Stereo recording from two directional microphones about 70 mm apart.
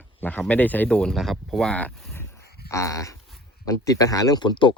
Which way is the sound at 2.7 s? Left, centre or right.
Left.